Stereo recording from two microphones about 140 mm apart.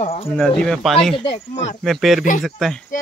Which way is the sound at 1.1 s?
40° left (ahead or behind).